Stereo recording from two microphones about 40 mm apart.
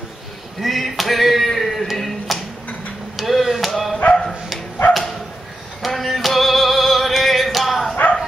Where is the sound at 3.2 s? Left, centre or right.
Centre.